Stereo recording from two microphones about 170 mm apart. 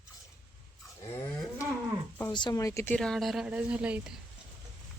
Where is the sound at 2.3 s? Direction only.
25° left (ahead or behind).